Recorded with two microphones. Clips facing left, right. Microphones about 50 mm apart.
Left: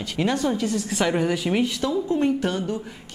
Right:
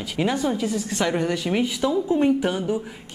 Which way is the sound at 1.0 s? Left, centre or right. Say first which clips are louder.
Left 1 dB; centre.